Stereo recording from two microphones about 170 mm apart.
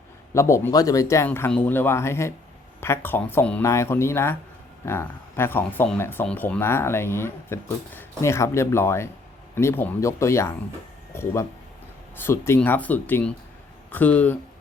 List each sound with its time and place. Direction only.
0.3 s speech: 15° left (ahead or behind)